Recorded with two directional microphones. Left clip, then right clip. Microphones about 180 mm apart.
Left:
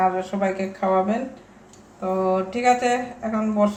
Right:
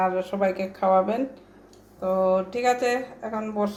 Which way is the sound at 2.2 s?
35° right (ahead or behind).